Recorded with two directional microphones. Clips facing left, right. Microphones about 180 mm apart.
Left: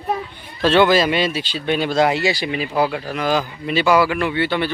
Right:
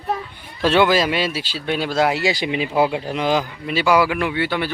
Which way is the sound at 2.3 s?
20° right (ahead or behind).